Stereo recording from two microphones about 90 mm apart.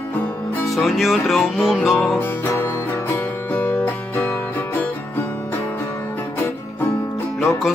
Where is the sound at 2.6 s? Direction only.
25° left (ahead or behind).